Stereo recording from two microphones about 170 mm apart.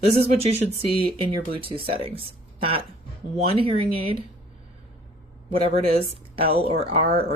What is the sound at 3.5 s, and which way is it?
Speech, 30° right (ahead or behind).